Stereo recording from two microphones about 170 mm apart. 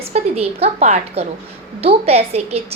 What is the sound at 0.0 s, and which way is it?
A woman's voice, 35° right (ahead or behind).